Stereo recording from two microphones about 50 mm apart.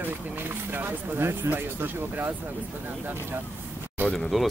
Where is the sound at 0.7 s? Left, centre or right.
Right.